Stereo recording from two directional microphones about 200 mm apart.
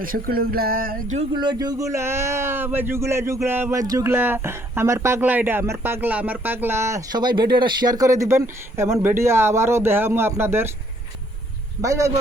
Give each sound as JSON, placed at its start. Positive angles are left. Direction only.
{"t": 0.0, "sound": "speech", "side_deg": -45}
{"t": 1.4, "sound": "a man's voice", "side_deg": -20}
{"t": 11.8, "sound": "a man's voice", "side_deg": -15}